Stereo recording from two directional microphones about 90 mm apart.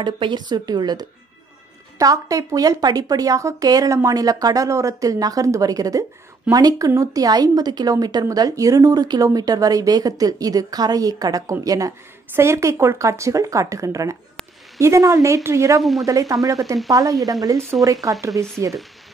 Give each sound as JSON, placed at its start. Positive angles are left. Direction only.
{"t": 0.0, "sound": "a woman's voice", "side_deg": -60}
{"t": 15.8, "sound": "speech", "side_deg": 0}
{"t": 16.1, "sound": "a woman's voice", "side_deg": -40}